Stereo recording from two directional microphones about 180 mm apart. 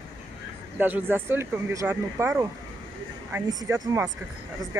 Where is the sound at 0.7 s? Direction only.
10° right (ahead or behind).